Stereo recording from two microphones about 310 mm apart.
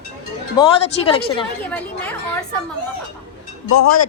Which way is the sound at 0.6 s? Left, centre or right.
Centre.